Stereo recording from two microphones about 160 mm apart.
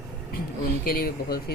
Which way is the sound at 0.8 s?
65° left (ahead or behind).